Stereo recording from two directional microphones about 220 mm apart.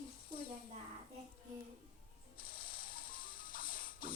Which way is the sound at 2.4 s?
40° left (ahead or behind).